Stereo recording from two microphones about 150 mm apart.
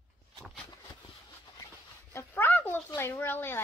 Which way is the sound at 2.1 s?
15° left (ahead or behind).